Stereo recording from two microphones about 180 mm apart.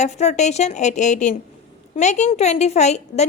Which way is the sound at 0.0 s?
40° left (ahead or behind).